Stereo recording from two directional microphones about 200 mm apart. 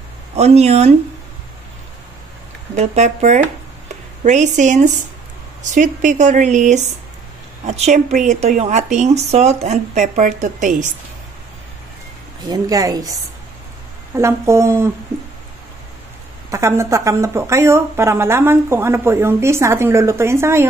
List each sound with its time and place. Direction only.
0.4 s speech: 30° right (ahead or behind)
2.7 s speech: 35° right (ahead or behind)
12.4 s speech: 20° right (ahead or behind)
16.4 s speech: 15° right (ahead or behind)